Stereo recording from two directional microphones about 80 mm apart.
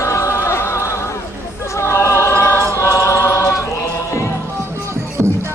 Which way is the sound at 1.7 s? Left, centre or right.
Left.